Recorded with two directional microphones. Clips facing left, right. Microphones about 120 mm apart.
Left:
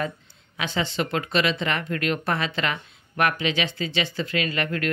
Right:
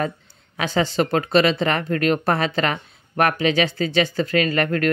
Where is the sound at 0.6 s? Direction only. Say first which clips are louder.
Right 6 dB; 40° right (ahead or behind).